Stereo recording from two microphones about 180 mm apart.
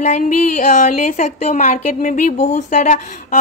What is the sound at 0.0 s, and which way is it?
A woman's voice, 40° left (ahead or behind).